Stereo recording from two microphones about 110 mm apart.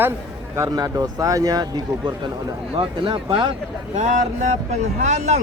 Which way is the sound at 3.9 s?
90° right.